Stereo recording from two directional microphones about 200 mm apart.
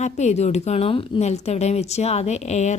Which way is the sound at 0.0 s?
35° left (ahead or behind).